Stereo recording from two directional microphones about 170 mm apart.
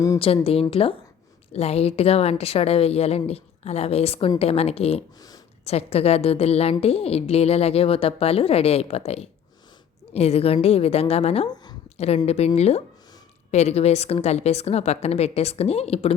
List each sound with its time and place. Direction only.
0.4 s a woman's voice: 35° left (ahead or behind)
11.4 s a sound: 25° left (ahead or behind)
11.9 s a woman's voice: 40° left (ahead or behind)